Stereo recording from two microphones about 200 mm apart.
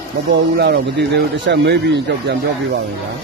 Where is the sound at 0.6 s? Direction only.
55° right (ahead or behind).